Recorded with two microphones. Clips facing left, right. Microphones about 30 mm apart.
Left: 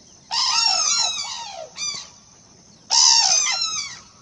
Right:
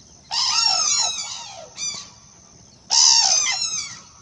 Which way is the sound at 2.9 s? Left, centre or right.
Centre.